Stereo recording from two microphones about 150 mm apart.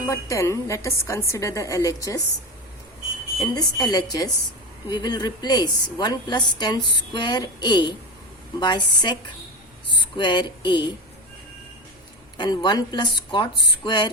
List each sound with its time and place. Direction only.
0.0 s a woman's voice: 20° left (ahead or behind)
3.5 s a woman's voice: 25° left (ahead or behind)
10.2 s speech: 30° left (ahead or behind)
12.4 s speech: 25° left (ahead or behind)